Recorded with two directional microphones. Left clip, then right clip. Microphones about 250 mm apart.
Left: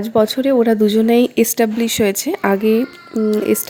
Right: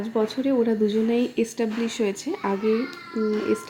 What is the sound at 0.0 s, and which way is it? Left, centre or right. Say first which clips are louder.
Speech: left 10 dB; left.